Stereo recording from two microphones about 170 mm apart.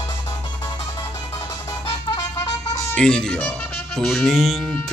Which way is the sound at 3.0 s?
5° left (ahead or behind).